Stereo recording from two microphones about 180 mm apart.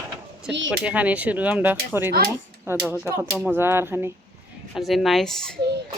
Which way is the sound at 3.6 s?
15° right (ahead or behind).